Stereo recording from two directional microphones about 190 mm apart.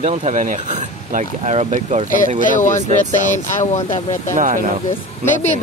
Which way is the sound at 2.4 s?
40° left (ahead or behind).